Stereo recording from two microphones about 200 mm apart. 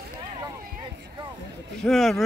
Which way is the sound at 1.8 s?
Centre (ahead or behind).